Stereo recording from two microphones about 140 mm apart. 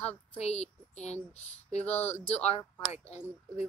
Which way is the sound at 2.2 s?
50° left (ahead or behind).